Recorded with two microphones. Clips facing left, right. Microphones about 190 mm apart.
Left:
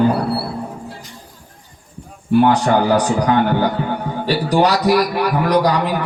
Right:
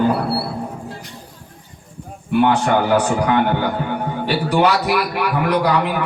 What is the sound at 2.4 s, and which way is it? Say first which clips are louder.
A man's voice: even; 35° left (ahead or behind).